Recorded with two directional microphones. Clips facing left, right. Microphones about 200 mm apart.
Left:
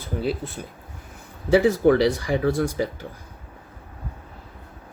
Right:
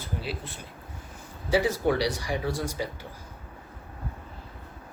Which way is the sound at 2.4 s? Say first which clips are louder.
Left 8 dB; 55° left (ahead or behind).